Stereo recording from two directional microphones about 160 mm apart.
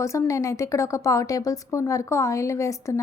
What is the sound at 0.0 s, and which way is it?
A woman's voice, 20° left (ahead or behind).